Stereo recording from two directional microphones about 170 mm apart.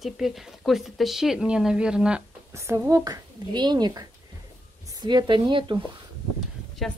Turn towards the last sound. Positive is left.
turn(degrees=0)  # may be behind; listen again after turning